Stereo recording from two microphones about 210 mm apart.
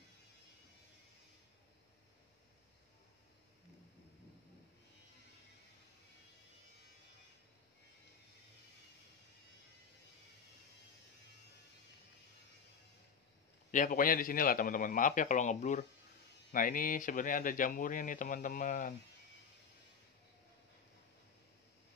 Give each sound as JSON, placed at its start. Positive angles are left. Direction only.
{"t": 13.7, "sound": "speech", "side_deg": 40}